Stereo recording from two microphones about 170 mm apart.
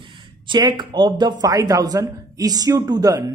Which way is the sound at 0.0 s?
30° right (ahead or behind).